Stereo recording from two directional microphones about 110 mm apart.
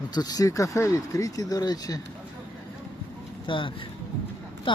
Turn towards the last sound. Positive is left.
turn(degrees=50)  # may be behind; listen again after turning